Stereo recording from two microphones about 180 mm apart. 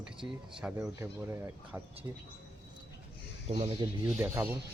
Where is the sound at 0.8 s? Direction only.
15° right (ahead or behind).